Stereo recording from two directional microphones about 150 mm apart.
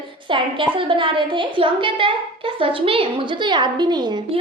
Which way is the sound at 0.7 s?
35° right (ahead or behind).